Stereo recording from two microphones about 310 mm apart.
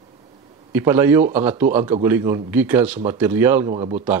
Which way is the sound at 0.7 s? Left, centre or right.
Centre.